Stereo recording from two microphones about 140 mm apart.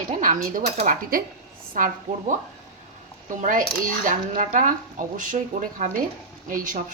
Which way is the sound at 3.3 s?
70° right (ahead or behind).